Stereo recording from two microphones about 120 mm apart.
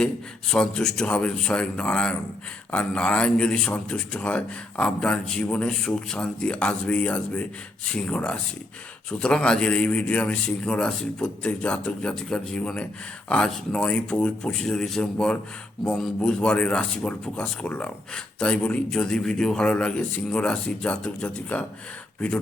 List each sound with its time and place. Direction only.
0.5 s a man's voice: 5° left (ahead or behind)